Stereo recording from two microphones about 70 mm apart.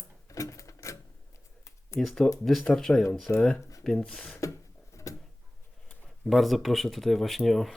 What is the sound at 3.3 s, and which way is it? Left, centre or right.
Speech, left.